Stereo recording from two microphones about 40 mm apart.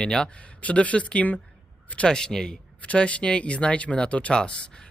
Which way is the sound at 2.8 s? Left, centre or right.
Left.